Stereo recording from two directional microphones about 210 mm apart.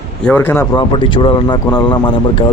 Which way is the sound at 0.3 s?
10° left (ahead or behind).